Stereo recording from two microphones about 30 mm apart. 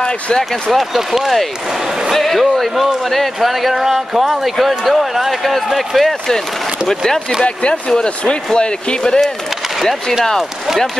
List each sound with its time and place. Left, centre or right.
0.7 s speech: centre
8.5 s speech: left